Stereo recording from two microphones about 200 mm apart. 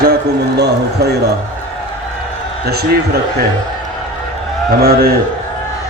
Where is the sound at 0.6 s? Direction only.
55° right (ahead or behind).